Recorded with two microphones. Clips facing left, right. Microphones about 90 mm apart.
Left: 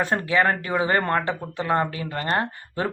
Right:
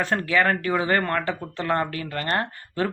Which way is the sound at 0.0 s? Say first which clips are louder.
Left 1 dB; 20° left (ahead or behind).